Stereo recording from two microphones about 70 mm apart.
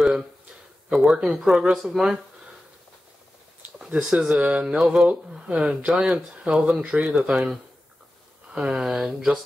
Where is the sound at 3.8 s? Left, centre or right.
Centre.